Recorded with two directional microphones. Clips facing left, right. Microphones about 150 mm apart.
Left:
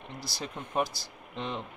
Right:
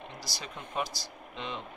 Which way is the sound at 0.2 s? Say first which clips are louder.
Left 3 dB; 50° left (ahead or behind).